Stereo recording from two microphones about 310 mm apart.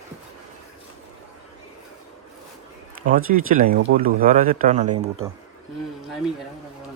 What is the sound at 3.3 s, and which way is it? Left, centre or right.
Speech, right.